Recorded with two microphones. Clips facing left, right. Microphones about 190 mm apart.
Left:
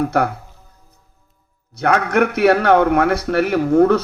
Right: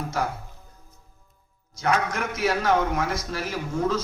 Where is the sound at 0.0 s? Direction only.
65° left (ahead or behind).